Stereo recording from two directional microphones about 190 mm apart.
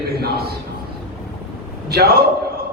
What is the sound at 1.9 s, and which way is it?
Speech, 55° right (ahead or behind).